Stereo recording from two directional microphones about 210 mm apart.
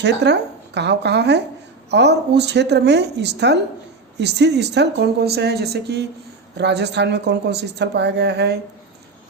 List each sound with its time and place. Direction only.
0.0 s a woman's voice: 55° right (ahead or behind)